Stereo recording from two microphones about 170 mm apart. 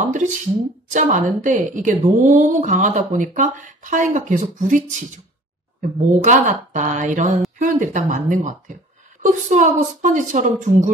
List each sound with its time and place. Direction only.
0.9 s a woman's voice: 45° right (ahead or behind)